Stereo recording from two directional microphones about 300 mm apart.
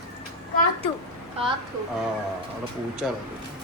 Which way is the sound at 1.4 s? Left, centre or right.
Centre.